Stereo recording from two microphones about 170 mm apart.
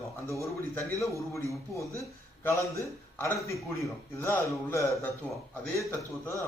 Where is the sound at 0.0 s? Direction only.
15° left (ahead or behind).